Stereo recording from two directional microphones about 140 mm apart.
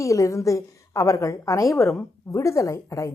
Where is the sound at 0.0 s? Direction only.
20° left (ahead or behind).